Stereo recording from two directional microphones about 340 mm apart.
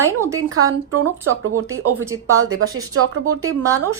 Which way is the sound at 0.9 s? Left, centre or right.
Right.